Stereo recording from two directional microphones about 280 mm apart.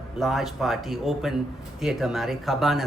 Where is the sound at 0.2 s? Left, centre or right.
Centre.